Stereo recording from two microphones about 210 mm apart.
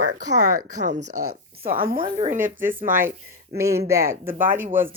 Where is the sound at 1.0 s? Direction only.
90° right.